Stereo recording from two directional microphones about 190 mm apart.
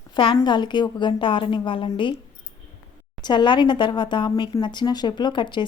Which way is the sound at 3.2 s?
25° left (ahead or behind).